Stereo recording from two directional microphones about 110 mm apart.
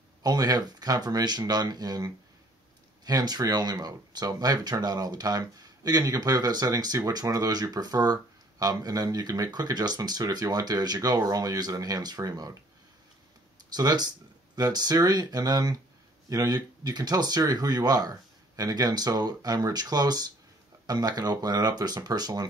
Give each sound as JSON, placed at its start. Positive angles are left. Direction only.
{"t": 0.2, "sound": "speech", "side_deg": -35}
{"t": 13.7, "sound": "speech", "side_deg": -40}